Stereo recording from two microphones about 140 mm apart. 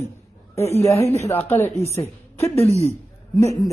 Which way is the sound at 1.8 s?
20° left (ahead or behind).